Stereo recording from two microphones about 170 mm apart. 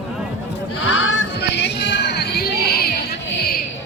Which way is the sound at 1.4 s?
90° left.